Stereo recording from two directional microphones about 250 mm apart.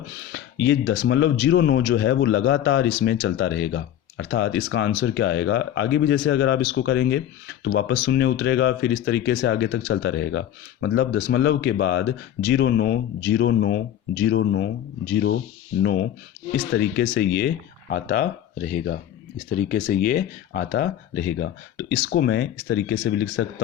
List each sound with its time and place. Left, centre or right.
0.2 s speech: left